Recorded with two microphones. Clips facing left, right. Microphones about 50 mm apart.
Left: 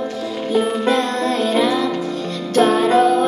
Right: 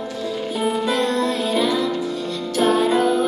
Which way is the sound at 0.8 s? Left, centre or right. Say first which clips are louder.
Left 2 dB; left.